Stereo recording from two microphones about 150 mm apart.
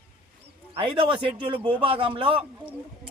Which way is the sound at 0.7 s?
35° right (ahead or behind).